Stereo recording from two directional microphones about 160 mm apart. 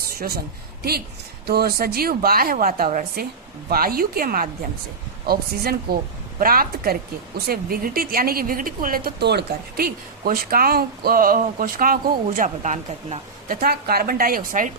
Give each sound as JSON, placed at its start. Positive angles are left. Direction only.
{"t": 0.2, "sound": "a woman's voice", "side_deg": -75}
{"t": 12.4, "sound": "speech", "side_deg": -50}
{"t": 13.6, "sound": "a woman's voice", "side_deg": -70}